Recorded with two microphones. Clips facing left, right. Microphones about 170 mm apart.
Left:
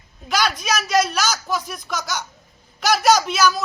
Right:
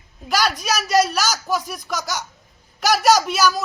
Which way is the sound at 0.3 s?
40° right (ahead or behind).